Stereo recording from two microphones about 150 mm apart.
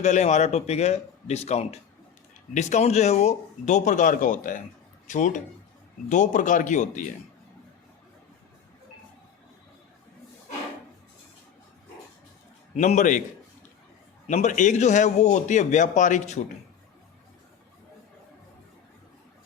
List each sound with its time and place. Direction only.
0.0 s a man's voice: 50° left (ahead or behind)
12.7 s speech: 55° left (ahead or behind)
14.3 s a man's voice: 55° left (ahead or behind)